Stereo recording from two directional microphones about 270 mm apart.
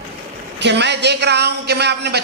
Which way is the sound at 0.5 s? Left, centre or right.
Right.